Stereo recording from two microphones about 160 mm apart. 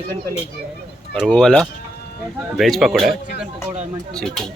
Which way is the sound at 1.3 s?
5° left (ahead or behind).